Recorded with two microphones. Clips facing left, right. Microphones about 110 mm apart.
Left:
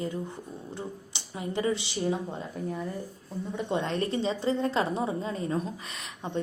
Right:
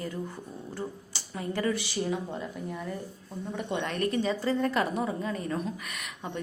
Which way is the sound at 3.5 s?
25° left (ahead or behind).